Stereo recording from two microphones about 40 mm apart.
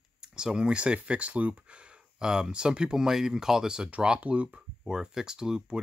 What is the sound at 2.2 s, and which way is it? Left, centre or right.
Speech, centre.